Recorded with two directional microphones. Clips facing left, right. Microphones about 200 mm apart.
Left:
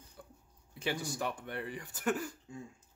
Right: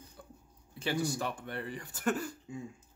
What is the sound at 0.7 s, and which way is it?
Speech, 20° left (ahead or behind).